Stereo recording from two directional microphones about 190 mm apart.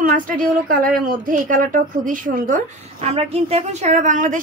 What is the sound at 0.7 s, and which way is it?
Speech, 45° right (ahead or behind).